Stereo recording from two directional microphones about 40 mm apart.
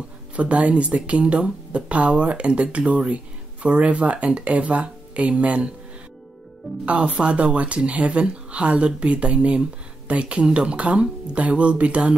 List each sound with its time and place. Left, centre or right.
0.4 s speech: right
6.9 s speech: right